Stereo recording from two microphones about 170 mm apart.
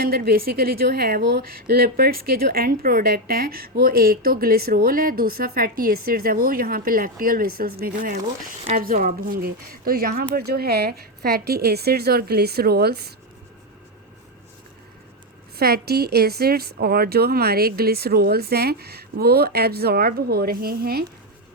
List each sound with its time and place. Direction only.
0.0 s speech: 65° right (ahead or behind)
15.5 s speech: 65° right (ahead or behind)